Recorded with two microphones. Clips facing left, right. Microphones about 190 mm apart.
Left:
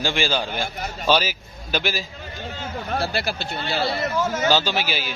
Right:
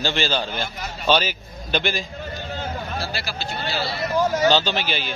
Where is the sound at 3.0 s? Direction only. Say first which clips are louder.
Left 4 dB; 55° left (ahead or behind).